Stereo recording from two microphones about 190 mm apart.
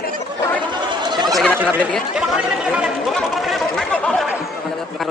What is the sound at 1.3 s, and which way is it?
Turkey, 5° left (ahead or behind).